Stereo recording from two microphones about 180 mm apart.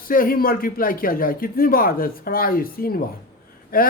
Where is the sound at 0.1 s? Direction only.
50° left (ahead or behind).